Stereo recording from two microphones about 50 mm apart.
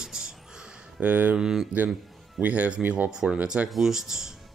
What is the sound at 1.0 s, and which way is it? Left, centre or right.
Speech, right.